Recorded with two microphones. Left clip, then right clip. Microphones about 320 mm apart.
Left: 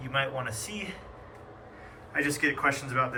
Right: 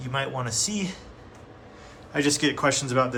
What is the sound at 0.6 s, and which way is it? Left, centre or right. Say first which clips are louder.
Speech: right 7 dB; right.